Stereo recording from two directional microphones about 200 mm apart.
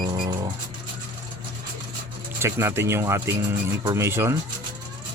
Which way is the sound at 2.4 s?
15° right (ahead or behind).